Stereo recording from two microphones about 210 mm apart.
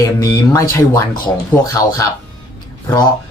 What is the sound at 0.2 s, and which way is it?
Speech, 15° left (ahead or behind).